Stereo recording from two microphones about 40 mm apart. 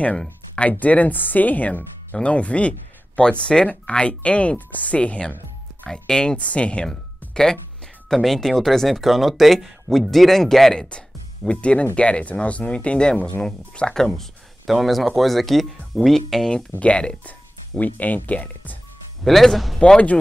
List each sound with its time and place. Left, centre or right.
0.6 s speech: left
2.2 s speech: left
5.9 s speech: centre
6.3 s speech: left
6.9 s music: centre
8.1 s speech: centre
10.7 s speech: centre
11.6 s speech: left; by 14.2 s centre
14.7 s speech: centre
16.8 s speech: left
17.7 s speech: left
19.2 s speech: centre